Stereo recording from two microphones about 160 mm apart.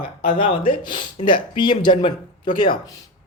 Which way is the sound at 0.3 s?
35° left (ahead or behind).